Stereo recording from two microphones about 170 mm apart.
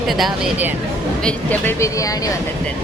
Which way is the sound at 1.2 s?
5° left (ahead or behind).